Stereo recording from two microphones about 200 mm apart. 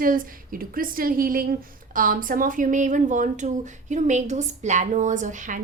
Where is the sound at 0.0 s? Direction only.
45° right (ahead or behind).